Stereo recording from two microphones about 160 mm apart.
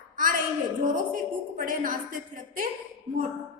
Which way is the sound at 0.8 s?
55° right (ahead or behind).